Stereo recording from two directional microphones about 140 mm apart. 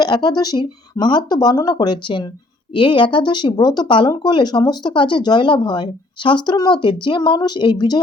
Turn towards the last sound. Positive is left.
turn(degrees=35)  # may be behind; listen again after turning